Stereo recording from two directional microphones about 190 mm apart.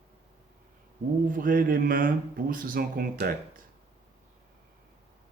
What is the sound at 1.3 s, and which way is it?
Speech, 45° right (ahead or behind).